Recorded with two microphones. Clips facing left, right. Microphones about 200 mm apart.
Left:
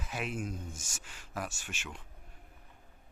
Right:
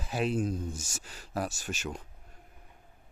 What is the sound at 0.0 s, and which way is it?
Speech, 35° right (ahead or behind).